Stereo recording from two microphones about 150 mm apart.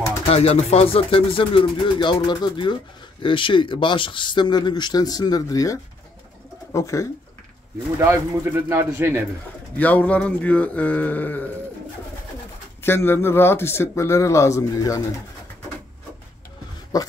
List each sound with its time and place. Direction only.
0.3 s speech: 45° left (ahead or behind); by 7.1 s 20° left (ahead or behind)
8.0 s speech: 20° right (ahead or behind)
9.8 s a man's voice: 10° left (ahead or behind)
12.8 s a man's voice: 15° left (ahead or behind)
16.9 s speech: 25° left (ahead or behind)